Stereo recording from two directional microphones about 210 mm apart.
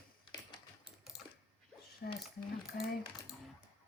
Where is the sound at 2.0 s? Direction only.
50° left (ahead or behind).